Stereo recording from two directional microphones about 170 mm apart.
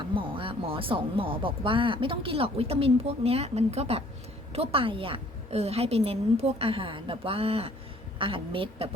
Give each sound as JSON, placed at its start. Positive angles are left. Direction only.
{"t": 0.0, "sound": "speech", "side_deg": -30}